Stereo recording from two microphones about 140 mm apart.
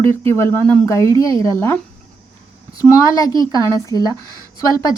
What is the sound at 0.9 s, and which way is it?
A child's voice, 20° left (ahead or behind).